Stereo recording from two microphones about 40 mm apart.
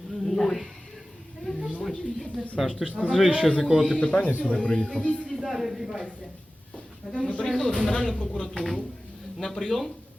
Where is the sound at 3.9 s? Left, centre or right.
Left.